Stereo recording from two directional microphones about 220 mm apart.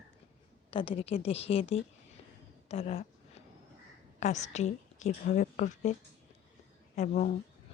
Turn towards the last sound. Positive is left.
turn(degrees=35)  # may be behind; listen again after turning